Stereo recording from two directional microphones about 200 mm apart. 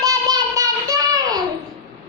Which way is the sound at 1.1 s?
20° right (ahead or behind).